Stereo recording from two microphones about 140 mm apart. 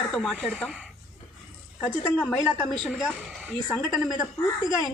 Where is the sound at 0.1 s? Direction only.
5° left (ahead or behind).